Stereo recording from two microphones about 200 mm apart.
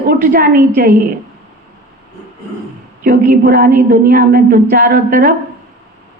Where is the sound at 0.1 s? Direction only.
50° right (ahead or behind).